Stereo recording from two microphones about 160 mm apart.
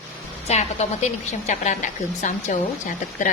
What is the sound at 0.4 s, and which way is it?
A woman's voice, 45° left (ahead or behind).